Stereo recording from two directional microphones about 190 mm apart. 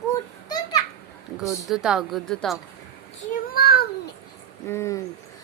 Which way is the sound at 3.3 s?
50° left (ahead or behind).